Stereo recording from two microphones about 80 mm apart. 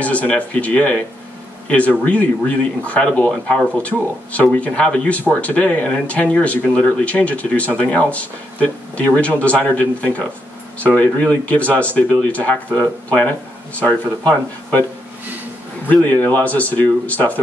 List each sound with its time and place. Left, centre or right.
0.0 s speech: centre
15.9 s a man's voice: left